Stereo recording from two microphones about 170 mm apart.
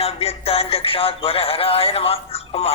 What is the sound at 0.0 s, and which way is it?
Speech, 35° left (ahead or behind).